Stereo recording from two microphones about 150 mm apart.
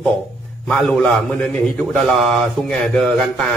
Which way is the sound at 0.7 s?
5° left (ahead or behind).